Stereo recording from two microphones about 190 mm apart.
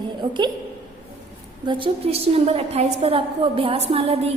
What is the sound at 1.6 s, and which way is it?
A woman's voice, 25° right (ahead or behind).